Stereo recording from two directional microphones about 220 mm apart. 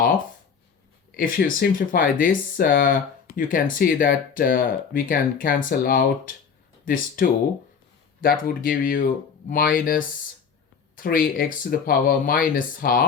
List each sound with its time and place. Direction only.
1.1 s speech: 40° left (ahead or behind)